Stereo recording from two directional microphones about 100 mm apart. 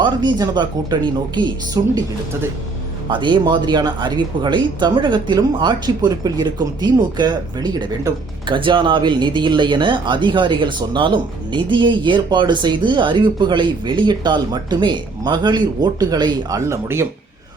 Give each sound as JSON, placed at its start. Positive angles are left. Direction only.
{"t": 0.0, "sound": "speech", "side_deg": -50}
{"t": 3.1, "sound": "speech", "side_deg": -50}
{"t": 8.4, "sound": "speech", "side_deg": -55}